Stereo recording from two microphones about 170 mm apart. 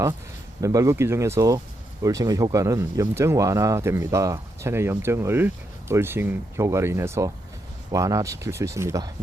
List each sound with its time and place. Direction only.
0.6 s speech: 20° right (ahead or behind)